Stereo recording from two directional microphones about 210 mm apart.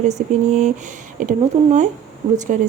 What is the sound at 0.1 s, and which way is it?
A woman's voice, 35° right (ahead or behind).